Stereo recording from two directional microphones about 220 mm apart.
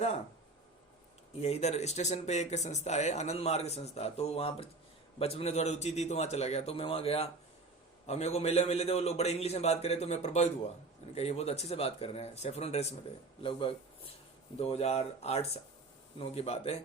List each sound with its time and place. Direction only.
1.4 s a man's voice: 30° left (ahead or behind)